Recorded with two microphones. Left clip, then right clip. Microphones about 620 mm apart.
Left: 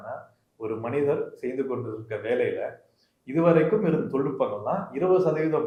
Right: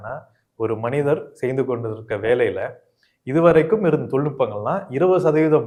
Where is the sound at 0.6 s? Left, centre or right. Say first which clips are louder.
Right 5 dB; right.